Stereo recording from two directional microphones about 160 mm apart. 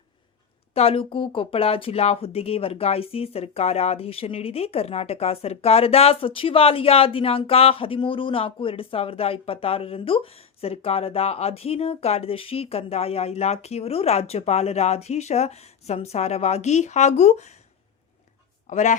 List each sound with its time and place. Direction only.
0.7 s speech: 35° left (ahead or behind)
18.7 s speech: 50° left (ahead or behind)